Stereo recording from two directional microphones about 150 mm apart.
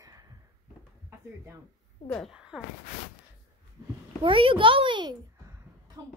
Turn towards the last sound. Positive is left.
turn(degrees=-35)  # may be behind; listen again after turning